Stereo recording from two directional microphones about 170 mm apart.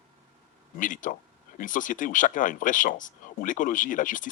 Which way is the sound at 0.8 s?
50° left (ahead or behind).